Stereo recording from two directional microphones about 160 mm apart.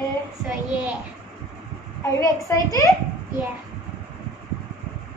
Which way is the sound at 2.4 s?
20° left (ahead or behind).